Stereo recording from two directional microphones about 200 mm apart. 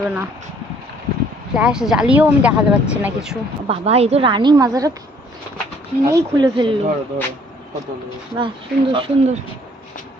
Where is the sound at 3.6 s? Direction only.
30° right (ahead or behind).